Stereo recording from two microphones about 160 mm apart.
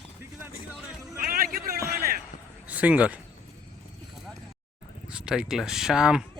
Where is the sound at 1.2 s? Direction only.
65° right (ahead or behind).